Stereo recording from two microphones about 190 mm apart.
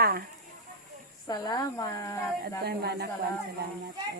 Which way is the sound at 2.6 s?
60° right (ahead or behind).